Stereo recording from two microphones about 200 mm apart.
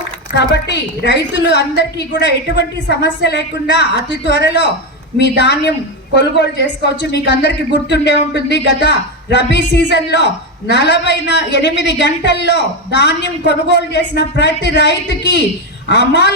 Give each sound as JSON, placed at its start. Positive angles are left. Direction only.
{"t": 0.3, "sound": "a woman's voice", "side_deg": 60}